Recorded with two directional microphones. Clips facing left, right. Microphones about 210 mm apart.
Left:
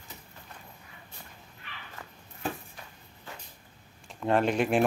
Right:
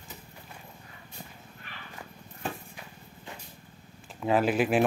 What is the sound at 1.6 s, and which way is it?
Bow-wow, 45° right (ahead or behind).